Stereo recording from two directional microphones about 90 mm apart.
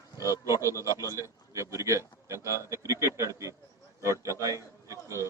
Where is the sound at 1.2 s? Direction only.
35° right (ahead or behind).